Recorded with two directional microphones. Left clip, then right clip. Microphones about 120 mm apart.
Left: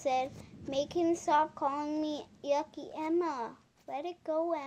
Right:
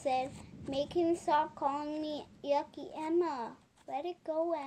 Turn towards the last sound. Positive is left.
turn(degrees=35)  # may be behind; listen again after turning